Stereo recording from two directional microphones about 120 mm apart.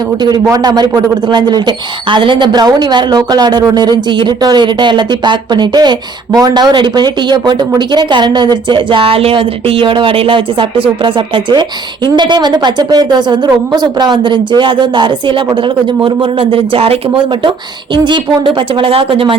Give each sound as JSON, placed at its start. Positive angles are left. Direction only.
{"t": 0.4, "sound": "speech", "side_deg": -30}